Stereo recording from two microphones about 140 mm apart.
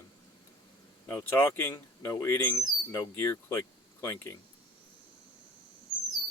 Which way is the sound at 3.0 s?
20° left (ahead or behind).